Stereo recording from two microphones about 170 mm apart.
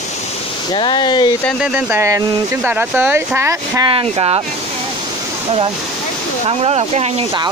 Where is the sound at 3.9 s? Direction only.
30° right (ahead or behind).